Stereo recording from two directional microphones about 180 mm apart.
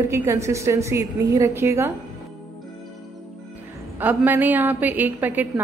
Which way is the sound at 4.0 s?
10° right (ahead or behind).